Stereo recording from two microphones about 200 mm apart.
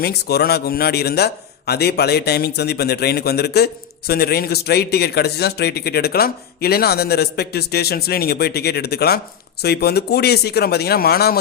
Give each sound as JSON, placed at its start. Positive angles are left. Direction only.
{"t": 0.0, "sound": "a man's voice", "side_deg": 55}